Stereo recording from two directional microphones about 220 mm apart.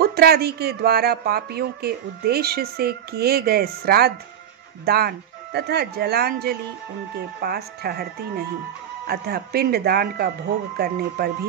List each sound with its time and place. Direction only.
0.0 s speech: 45° right (ahead or behind)